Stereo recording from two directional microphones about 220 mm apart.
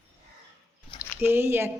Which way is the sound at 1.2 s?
10° right (ahead or behind).